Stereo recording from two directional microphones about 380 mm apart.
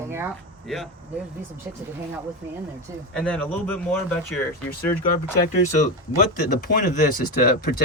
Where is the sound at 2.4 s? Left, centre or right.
Centre.